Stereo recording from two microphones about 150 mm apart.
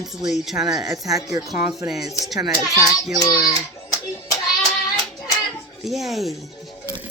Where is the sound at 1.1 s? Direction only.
20° right (ahead or behind).